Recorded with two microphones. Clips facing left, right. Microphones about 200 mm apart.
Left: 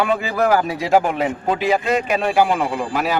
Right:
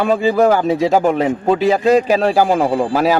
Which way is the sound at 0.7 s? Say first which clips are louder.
Right 4 dB; 40° right (ahead or behind).